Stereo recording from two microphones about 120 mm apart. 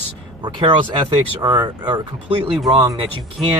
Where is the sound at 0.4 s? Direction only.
45° right (ahead or behind).